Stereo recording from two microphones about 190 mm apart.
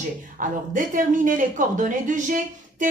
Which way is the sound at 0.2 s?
45° right (ahead or behind).